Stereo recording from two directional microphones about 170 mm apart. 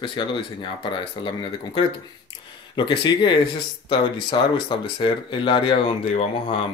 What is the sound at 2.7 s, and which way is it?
Speech, 30° left (ahead or behind).